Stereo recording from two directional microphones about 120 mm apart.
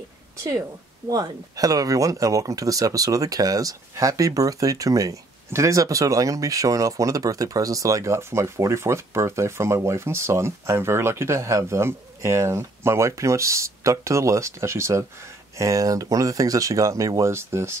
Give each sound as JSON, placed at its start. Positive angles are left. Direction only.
{"t": 1.0, "sound": "speech", "side_deg": -30}